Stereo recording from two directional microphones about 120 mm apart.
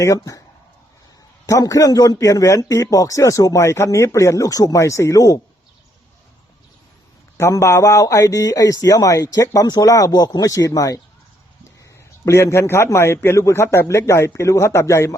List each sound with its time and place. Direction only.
0.0 s a man's voice: 25° left (ahead or behind)
1.5 s a man's voice: 30° left (ahead or behind)
7.3 s a man's voice: 25° left (ahead or behind)
12.2 s a man's voice: 25° left (ahead or behind)